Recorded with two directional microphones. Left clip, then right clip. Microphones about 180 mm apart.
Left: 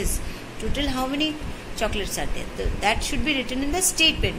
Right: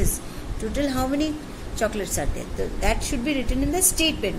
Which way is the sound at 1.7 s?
50° right (ahead or behind).